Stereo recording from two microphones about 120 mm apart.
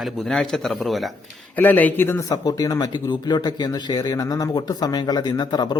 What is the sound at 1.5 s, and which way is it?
Speech, 15° left (ahead or behind).